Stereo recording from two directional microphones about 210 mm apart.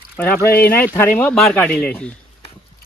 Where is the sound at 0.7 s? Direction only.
10° left (ahead or behind).